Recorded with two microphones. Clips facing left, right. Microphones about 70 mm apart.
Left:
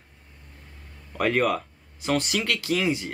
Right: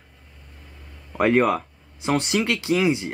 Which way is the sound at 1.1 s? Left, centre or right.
Right.